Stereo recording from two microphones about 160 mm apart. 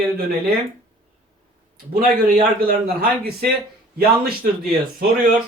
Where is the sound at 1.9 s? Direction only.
65° right (ahead or behind).